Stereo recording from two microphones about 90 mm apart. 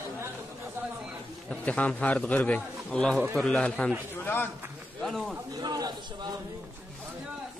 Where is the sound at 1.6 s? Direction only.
15° left (ahead or behind).